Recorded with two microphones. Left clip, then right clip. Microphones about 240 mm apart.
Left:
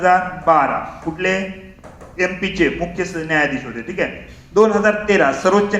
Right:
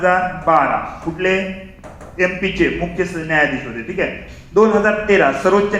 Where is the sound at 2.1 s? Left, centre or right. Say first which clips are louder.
Right 2 dB; left.